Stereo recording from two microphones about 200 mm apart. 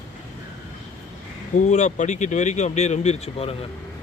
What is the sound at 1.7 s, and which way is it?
A man's voice, 35° left (ahead or behind).